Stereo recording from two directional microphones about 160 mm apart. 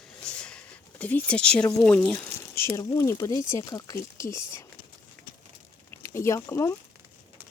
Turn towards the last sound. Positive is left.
turn(degrees=15)  # may be behind; listen again after turning